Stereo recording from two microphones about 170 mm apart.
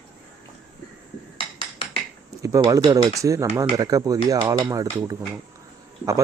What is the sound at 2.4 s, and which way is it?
Speech, 20° right (ahead or behind).